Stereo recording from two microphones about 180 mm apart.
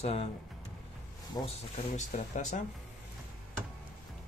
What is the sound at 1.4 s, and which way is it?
Speech, 20° left (ahead or behind).